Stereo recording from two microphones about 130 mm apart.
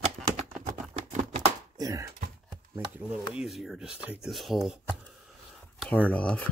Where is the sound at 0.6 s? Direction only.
65° right (ahead or behind).